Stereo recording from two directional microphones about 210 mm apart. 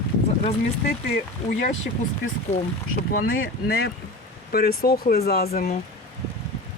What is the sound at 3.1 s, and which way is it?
Speech, 45° left (ahead or behind).